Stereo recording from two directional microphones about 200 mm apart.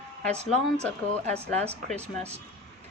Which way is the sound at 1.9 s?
30° right (ahead or behind).